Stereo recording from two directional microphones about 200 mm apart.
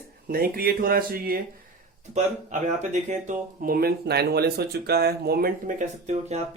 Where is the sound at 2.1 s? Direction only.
35° right (ahead or behind).